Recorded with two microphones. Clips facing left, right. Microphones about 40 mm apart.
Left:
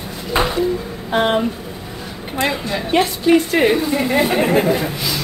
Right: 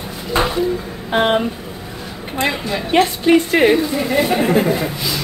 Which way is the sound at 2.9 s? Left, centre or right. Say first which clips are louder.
Right 1 dB; right.